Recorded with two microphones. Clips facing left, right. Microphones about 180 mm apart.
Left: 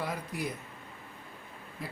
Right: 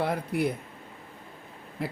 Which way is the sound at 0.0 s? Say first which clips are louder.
Right 8 dB; 60° right (ahead or behind).